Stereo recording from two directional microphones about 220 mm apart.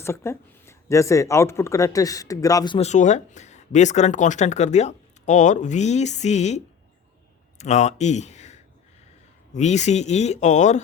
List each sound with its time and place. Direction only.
0.0 s speech: 10° left (ahead or behind); by 6.6 s 30° left (ahead or behind)
7.6 s speech: 30° left (ahead or behind)